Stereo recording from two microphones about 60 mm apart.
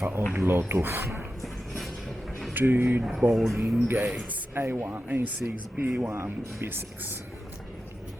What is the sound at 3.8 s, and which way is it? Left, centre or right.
Speech, right.